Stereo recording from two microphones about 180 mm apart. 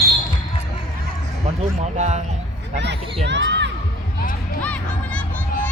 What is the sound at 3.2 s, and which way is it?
Crowd, 75° right (ahead or behind).